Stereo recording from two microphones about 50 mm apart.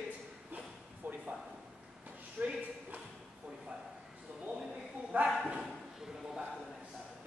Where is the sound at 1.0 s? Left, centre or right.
Right.